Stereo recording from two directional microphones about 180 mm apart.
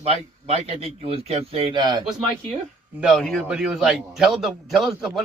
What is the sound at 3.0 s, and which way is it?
A man's voice, centre (ahead or behind).